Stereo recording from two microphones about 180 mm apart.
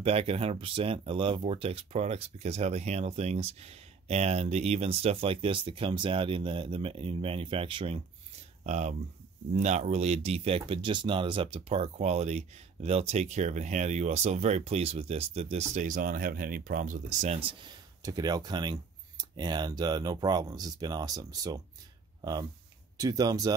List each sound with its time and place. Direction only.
0.0 s speech: 35° right (ahead or behind)
8.6 s speech: 40° right (ahead or behind); by 23.5 s 20° right (ahead or behind)